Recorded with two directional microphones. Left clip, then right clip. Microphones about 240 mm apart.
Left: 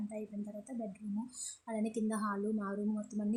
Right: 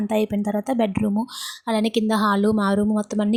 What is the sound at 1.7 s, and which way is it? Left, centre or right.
A woman's voice, right.